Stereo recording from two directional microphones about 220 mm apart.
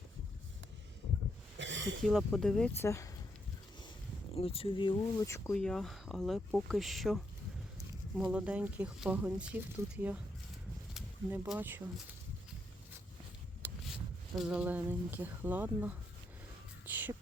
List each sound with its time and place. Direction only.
1.5 s a sound: 55° right (ahead or behind)
2.0 s speech: centre (ahead or behind)
4.4 s speech: 25° left (ahead or behind); by 7.2 s centre (ahead or behind)
8.2 s speech: 5° right (ahead or behind)
13.6 s rub: 10° right (ahead or behind)
14.3 s speech: 5° right (ahead or behind)
16.8 s music: 10° right (ahead or behind)